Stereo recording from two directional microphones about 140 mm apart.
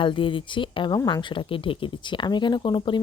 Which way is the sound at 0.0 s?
35° left (ahead or behind).